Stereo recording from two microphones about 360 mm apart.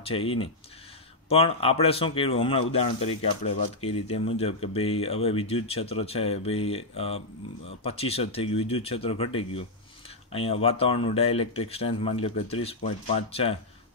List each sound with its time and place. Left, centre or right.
0.0 s speech: centre